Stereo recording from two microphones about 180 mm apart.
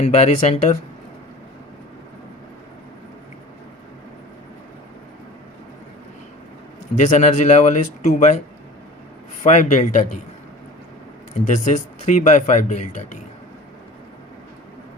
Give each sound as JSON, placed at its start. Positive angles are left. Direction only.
{"t": 0.0, "sound": "speech", "side_deg": 40}
{"t": 6.9, "sound": "speech", "side_deg": 40}
{"t": 9.4, "sound": "speech", "side_deg": 40}
{"t": 11.4, "sound": "speech", "side_deg": 40}